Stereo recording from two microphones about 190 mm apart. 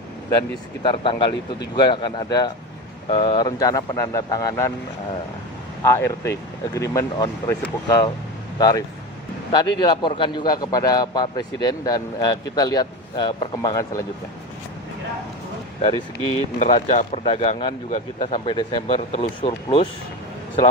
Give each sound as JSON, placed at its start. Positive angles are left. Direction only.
{"t": 0.8, "sound": "a man's voice", "side_deg": 25}
{"t": 5.8, "sound": "a man's voice", "side_deg": 15}
{"t": 15.8, "sound": "a man's voice", "side_deg": 25}